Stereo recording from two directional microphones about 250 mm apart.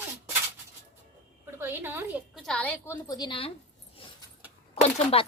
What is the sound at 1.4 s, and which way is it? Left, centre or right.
A woman's voice, centre.